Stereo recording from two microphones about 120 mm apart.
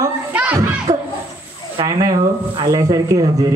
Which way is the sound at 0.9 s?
60° right (ahead or behind).